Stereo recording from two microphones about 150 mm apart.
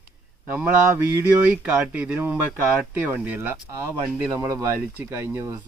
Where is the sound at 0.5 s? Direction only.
10° right (ahead or behind).